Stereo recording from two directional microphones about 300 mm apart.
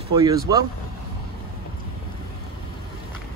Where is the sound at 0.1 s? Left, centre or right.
Centre.